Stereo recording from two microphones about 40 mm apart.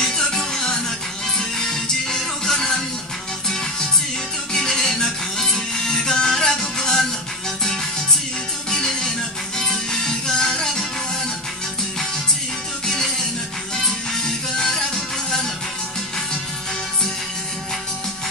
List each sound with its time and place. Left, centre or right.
0.0 s music: centre
4.6 s music: centre
8.6 s music: centre
12.8 s music: centre